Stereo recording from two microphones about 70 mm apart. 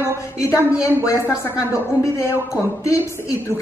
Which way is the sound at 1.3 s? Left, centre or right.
Left.